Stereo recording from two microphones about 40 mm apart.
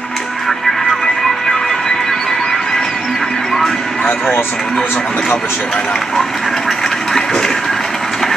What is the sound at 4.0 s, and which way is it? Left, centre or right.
Music, left.